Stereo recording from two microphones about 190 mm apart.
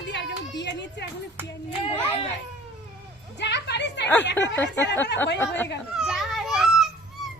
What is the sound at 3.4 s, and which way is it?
Music, 65° left (ahead or behind).